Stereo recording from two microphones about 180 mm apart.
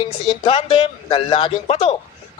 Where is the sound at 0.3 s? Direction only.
30° left (ahead or behind).